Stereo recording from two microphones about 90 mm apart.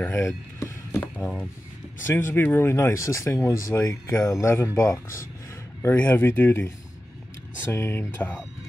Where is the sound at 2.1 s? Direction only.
30° left (ahead or behind).